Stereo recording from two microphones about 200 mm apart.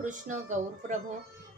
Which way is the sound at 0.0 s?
40° right (ahead or behind).